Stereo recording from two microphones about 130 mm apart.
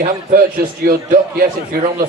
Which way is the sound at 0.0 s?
90° right.